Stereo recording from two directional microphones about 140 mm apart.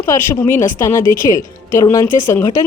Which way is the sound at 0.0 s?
20° left (ahead or behind).